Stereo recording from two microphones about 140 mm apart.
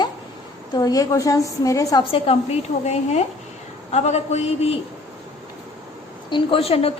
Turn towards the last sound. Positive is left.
turn(degrees=45)  # may be behind; listen again after turning